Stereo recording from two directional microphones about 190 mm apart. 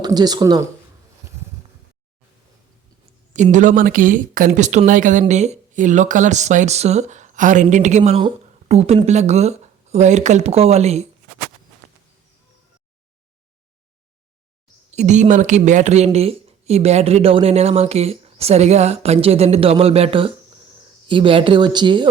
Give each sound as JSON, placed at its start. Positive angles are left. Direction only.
{"t": 0.0, "sound": "a woman's voice", "side_deg": -20}
{"t": 3.3, "sound": "a woman's voice", "side_deg": -40}
{"t": 14.8, "sound": "a woman's voice", "side_deg": -40}